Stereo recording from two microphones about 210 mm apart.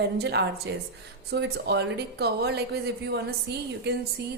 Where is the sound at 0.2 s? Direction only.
50° right (ahead or behind).